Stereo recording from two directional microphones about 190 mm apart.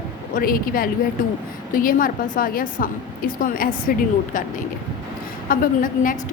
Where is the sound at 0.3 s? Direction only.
50° left (ahead or behind).